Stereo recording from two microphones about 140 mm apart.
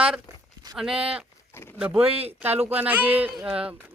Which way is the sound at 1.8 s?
10° right (ahead or behind).